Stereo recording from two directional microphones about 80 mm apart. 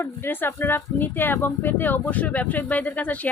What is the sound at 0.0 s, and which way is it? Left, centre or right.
A woman's voice, left.